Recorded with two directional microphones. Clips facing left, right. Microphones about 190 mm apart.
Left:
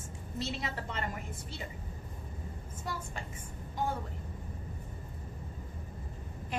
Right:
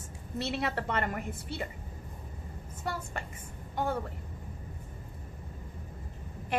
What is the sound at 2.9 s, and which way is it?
Speech, 65° right (ahead or behind).